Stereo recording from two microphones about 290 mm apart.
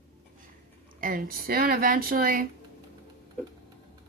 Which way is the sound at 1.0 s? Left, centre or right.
Right.